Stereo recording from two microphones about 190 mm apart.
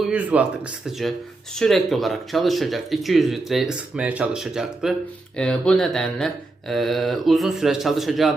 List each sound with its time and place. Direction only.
0.0 s speech: 5° right (ahead or behind)